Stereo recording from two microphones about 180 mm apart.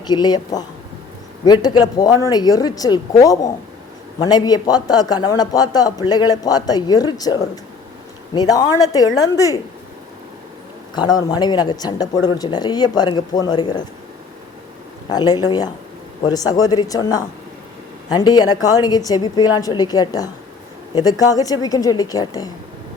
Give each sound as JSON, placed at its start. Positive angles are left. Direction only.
{"t": 0.1, "sound": "speech", "side_deg": 25}
{"t": 10.9, "sound": "speech", "side_deg": 25}
{"t": 15.1, "sound": "speech", "side_deg": 20}